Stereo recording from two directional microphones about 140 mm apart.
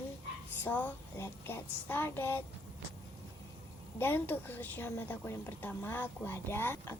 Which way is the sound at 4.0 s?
15° left (ahead or behind).